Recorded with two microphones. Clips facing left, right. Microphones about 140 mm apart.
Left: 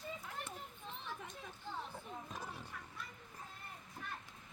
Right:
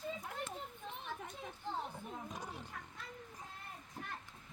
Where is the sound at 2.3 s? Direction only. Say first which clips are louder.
Right 1 dB; 15° right (ahead or behind).